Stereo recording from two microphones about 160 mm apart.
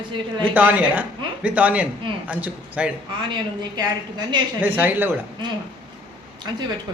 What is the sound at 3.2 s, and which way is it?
A woman's voice, 30° right (ahead or behind).